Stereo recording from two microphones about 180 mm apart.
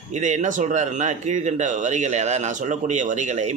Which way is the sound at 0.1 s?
40° right (ahead or behind).